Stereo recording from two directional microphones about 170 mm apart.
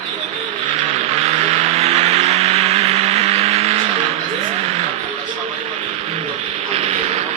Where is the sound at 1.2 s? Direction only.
35° right (ahead or behind).